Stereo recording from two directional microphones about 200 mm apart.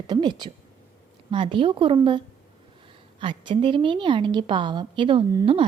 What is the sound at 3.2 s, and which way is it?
Speech, 25° right (ahead or behind).